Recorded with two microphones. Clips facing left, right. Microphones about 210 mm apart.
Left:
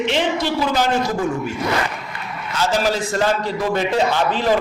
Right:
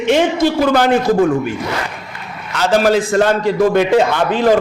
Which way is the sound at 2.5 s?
60° right (ahead or behind).